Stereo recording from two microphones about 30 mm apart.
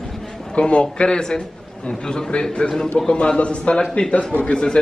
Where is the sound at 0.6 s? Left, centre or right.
Left.